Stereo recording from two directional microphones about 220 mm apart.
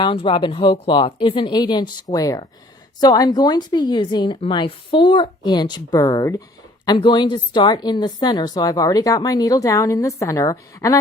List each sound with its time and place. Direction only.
0.0 s a woman's voice: 20° left (ahead or behind)